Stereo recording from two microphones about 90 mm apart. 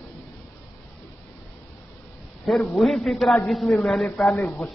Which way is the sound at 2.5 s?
5° left (ahead or behind).